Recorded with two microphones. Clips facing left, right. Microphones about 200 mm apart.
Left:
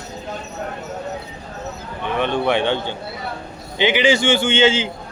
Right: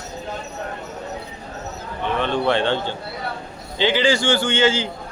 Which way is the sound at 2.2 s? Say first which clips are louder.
Left 2 dB; 15° left (ahead or behind).